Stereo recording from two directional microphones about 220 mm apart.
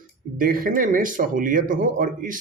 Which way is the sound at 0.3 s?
40° right (ahead or behind).